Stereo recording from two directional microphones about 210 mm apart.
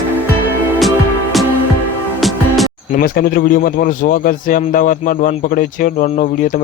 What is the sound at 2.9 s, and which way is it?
A man's voice, 45° left (ahead or behind).